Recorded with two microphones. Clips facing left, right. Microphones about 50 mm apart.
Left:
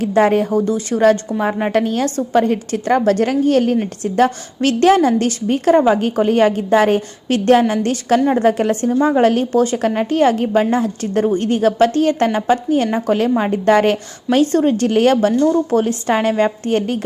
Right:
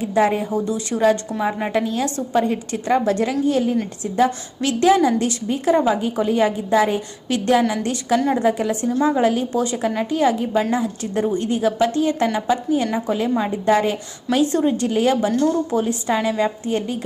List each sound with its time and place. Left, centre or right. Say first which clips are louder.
0.0 s a woman's voice: left 5 dB; left
1.3 s a woman's voice: left 4 dB; left
1.7 s a woman's voice: left 4 dB; left
4.6 s a woman's voice: left 3 dB; left
5.7 s a woman's voice: left 5 dB; left
6.0 s a woman's voice: left 5 dB; left
8.9 s a woman's voice: left 3 dB; left
9.2 s a woman's voice: left 5 dB; left
14.3 s a woman's voice: left 4 dB; left
14.8 s a woman's voice: left 5 dB; left